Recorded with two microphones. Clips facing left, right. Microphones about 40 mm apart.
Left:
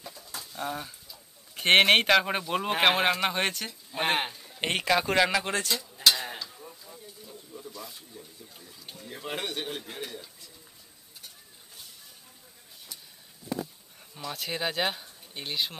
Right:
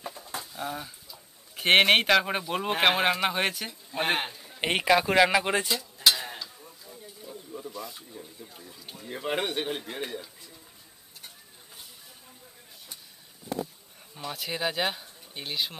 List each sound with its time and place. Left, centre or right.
0.0 s bird: right
0.5 s a man's voice: centre
6.0 s a sound: centre
7.2 s a sound: centre
8.2 s speech: centre
8.5 s a man's voice: centre
9.1 s speech: centre
13.5 s a sound: centre
14.2 s a man's voice: centre